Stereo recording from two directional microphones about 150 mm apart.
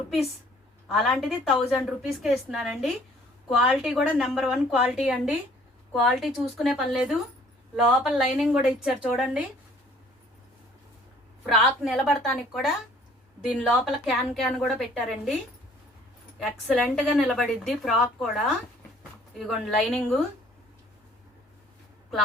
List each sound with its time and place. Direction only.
0.9 s a woman's voice: centre (ahead or behind)
11.4 s a woman's voice: centre (ahead or behind)
13.6 s a woman's voice: 10° left (ahead or behind)
16.4 s a woman's voice: centre (ahead or behind)